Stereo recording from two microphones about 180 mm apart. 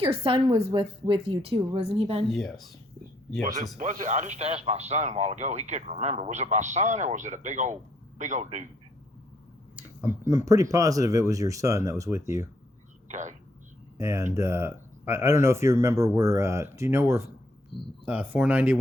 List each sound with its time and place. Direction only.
0.0 s speech: 30° right (ahead or behind)
2.3 s speech: centre (ahead or behind)
3.8 s speech: 45° right (ahead or behind)
9.7 s speech: 10° right (ahead or behind)
13.1 s a sound: 40° right (ahead or behind)
14.0 s speech: 15° right (ahead or behind)